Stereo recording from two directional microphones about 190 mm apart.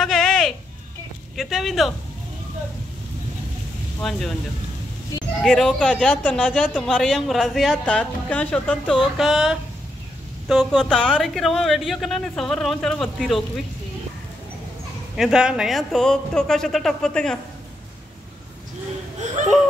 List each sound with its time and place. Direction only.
0.0 s a sound: centre (ahead or behind)
1.3 s speech: centre (ahead or behind)
4.0 s speech: centre (ahead or behind)
5.4 s speech: centre (ahead or behind)
15.1 s speech: 5° right (ahead or behind)
19.2 s a sound: 40° right (ahead or behind)